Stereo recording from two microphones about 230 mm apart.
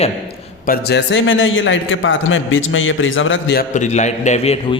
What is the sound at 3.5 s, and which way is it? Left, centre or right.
A man's voice, left.